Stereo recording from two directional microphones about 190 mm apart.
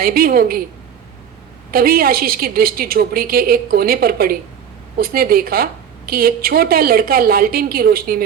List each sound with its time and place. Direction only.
0.0 s a woman's voice: 50° right (ahead or behind)
1.7 s a woman's voice: 50° right (ahead or behind)